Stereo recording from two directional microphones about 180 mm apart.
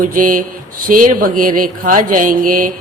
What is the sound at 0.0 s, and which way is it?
A man's voice, 50° right (ahead or behind).